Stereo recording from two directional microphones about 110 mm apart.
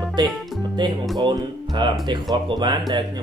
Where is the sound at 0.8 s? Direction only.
45° right (ahead or behind).